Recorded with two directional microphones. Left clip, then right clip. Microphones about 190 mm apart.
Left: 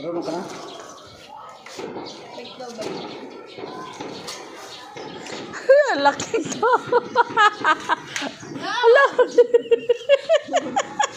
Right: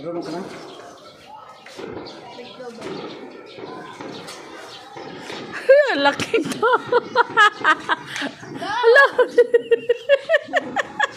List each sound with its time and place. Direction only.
5.5 s speech: 25° right (ahead or behind)